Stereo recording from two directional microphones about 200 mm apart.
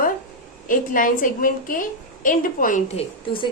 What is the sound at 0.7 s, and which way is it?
A woman's voice, 40° left (ahead or behind).